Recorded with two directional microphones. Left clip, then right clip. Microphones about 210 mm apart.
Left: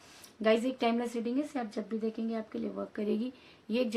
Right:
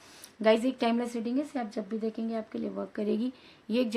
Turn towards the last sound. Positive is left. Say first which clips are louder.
# right 2 dB
turn(degrees=-25)  # may be behind; listen again after turning